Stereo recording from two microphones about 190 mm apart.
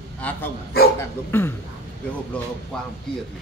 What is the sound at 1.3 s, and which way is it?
Speech, 10° left (ahead or behind).